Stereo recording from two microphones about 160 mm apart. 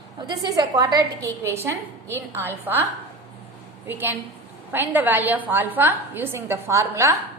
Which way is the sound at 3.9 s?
15° right (ahead or behind).